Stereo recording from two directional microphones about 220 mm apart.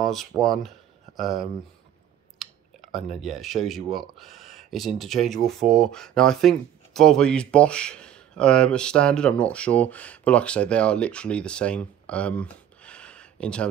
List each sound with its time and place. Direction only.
0.0 s a sound: centre (ahead or behind)
0.4 s speech: centre (ahead or behind)
3.1 s speech: centre (ahead or behind)